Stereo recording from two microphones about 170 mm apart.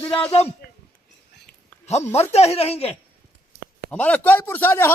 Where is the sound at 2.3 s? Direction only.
40° left (ahead or behind).